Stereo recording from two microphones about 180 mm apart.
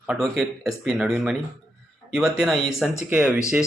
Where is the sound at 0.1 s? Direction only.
Centre (ahead or behind).